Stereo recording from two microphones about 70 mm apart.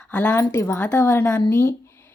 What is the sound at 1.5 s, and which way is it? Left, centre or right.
Speech, left.